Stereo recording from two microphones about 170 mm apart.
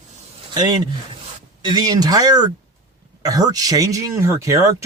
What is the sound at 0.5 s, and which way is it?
Speech, 25° right (ahead or behind).